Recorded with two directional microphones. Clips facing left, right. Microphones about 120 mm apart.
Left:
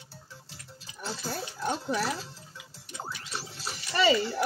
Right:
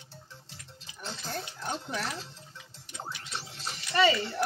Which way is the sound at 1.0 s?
5° left (ahead or behind).